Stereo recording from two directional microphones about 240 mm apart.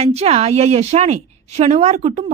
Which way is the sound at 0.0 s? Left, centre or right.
Right.